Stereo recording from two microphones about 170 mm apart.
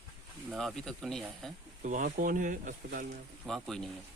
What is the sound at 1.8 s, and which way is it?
Speech, 50° right (ahead or behind).